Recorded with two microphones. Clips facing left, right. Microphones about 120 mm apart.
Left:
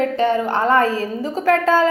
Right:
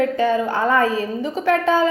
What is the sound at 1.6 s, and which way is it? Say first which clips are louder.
Speech: left 1 dB; 90° left.